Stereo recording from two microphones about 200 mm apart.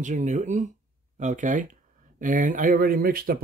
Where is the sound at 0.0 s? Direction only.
35° right (ahead or behind).